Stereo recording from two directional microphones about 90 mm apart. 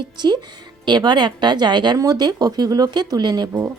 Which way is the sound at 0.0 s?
55° right (ahead or behind).